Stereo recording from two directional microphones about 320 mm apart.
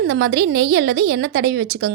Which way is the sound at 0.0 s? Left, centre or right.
Right.